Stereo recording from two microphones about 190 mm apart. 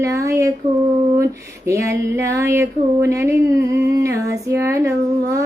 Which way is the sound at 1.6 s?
15° right (ahead or behind).